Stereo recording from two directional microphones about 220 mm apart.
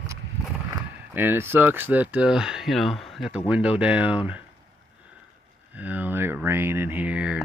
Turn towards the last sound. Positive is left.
turn(degrees=-5)  # may be behind; listen again after turning